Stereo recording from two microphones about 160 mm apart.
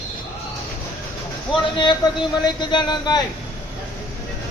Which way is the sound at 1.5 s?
30° left (ahead or behind).